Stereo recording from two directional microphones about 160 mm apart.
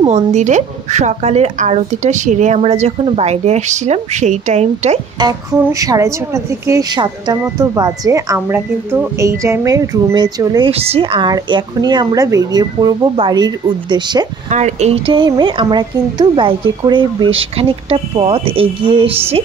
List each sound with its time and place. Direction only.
0.0 s speech: 45° right (ahead or behind)
5.2 s a woman's voice: 20° right (ahead or behind)
10.7 s a woman's voice: 40° right (ahead or behind)
14.5 s speech: 45° right (ahead or behind)